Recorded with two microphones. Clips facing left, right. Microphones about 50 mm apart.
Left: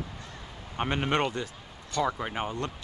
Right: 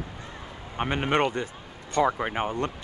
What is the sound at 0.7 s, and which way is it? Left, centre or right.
Speech, centre.